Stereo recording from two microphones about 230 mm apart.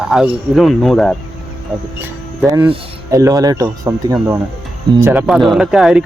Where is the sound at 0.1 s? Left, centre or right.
Centre.